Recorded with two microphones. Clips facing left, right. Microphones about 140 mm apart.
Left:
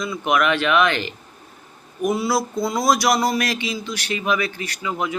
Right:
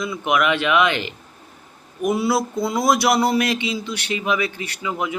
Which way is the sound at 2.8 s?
25° right (ahead or behind).